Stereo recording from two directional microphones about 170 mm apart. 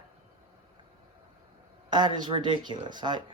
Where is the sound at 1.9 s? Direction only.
25° right (ahead or behind).